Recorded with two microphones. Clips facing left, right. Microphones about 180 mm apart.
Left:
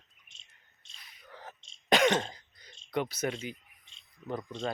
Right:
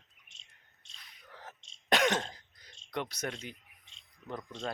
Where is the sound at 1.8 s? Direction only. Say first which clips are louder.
Left 3 dB; centre (ahead or behind).